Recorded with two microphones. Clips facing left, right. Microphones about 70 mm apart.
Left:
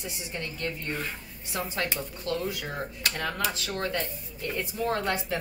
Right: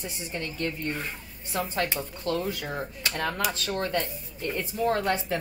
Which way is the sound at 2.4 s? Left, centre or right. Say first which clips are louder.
Right 1 dB; right.